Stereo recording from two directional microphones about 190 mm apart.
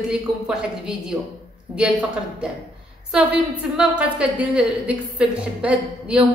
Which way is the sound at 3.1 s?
5° right (ahead or behind).